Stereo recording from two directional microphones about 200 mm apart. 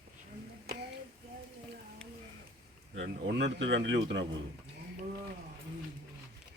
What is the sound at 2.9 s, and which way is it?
Speech, 60° right (ahead or behind).